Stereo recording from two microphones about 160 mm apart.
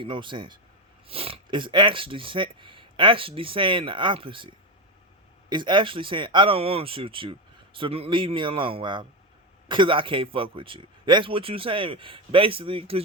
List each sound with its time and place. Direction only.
0.0 s speech: 30° right (ahead or behind)
5.5 s speech: 30° right (ahead or behind)